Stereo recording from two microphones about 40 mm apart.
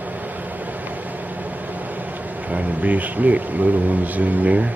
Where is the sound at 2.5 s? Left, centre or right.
Right.